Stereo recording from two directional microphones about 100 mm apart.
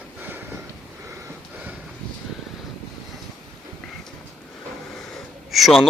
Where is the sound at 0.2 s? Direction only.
20° right (ahead or behind).